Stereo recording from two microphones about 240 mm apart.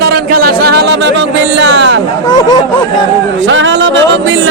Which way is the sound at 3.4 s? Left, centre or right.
Right.